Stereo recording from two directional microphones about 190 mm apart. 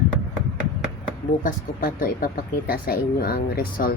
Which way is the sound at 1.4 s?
45° left (ahead or behind).